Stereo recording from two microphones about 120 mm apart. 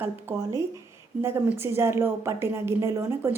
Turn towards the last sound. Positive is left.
turn(degrees=-20)  # may be behind; listen again after turning